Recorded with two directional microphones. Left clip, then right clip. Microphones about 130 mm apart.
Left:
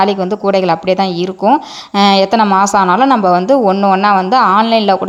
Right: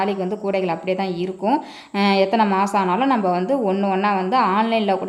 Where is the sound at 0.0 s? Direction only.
35° left (ahead or behind).